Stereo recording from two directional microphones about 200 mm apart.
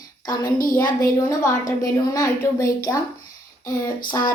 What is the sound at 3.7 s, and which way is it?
Speech, 45° left (ahead or behind).